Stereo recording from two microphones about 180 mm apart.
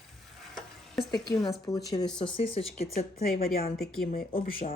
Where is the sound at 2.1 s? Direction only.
30° left (ahead or behind).